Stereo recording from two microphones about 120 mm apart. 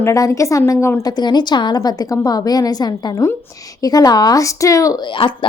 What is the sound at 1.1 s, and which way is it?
A woman's voice, 35° left (ahead or behind).